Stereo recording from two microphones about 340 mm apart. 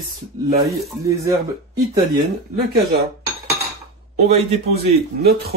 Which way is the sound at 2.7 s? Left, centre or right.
Right.